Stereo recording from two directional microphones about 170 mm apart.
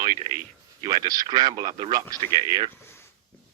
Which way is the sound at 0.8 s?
25° right (ahead or behind).